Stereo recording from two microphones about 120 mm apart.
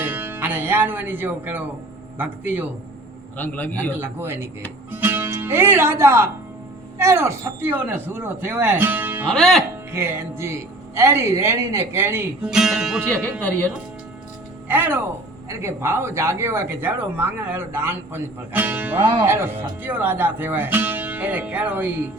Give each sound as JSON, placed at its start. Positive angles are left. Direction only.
{"t": 0.0, "sound": "music", "side_deg": -15}
{"t": 2.1, "sound": "speech", "side_deg": -15}
{"t": 3.3, "sound": "a man's voice", "side_deg": 15}
{"t": 3.9, "sound": "speech", "side_deg": -20}
{"t": 9.3, "sound": "speech", "side_deg": 0}
{"t": 9.9, "sound": "speech", "side_deg": -20}
{"t": 12.5, "sound": "speech", "side_deg": -5}
{"t": 14.7, "sound": "speech", "side_deg": -15}